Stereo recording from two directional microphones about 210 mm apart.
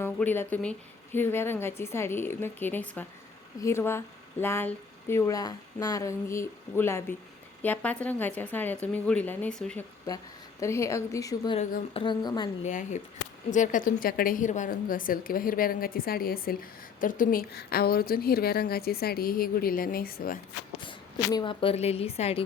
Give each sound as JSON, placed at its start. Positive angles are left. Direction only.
{"t": 0.0, "sound": "speech", "side_deg": 10}
{"t": 10.1, "sound": "speech", "side_deg": 15}
{"t": 11.5, "sound": "a woman's voice", "side_deg": 30}
{"t": 12.0, "sound": "speech", "side_deg": 20}
{"t": 12.6, "sound": "a woman's voice", "side_deg": 35}
{"t": 21.3, "sound": "speech", "side_deg": 25}